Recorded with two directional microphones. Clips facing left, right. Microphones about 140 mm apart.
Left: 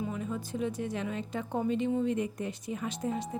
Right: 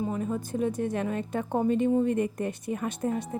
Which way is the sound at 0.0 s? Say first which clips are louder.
Right 5 dB; 45° right (ahead or behind).